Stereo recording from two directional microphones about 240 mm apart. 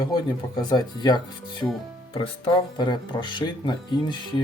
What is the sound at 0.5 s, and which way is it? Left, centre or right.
Speech, centre.